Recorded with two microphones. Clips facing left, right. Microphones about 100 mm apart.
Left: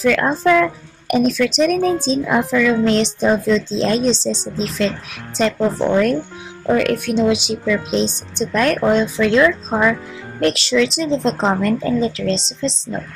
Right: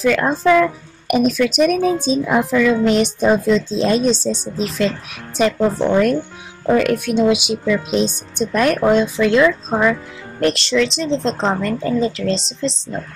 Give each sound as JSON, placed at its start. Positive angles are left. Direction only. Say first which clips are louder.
{"t": 0.0, "sound": "a woman's voice", "louder": "even", "side_deg": -5}